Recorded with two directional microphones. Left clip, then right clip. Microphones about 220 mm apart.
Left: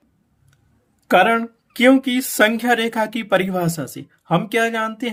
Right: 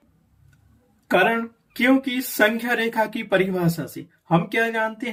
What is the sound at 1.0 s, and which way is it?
Speech, 40° left (ahead or behind).